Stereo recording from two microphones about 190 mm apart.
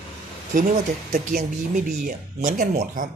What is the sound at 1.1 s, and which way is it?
Speech, 45° right (ahead or behind).